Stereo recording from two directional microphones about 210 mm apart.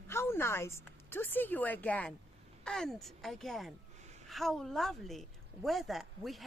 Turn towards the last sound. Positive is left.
turn(degrees=0)  # may be behind; listen again after turning